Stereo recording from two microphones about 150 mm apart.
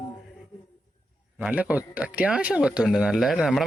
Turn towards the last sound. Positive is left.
turn(degrees=0)  # may be behind; listen again after turning